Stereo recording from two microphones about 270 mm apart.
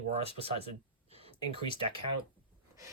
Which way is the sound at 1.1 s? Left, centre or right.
Right.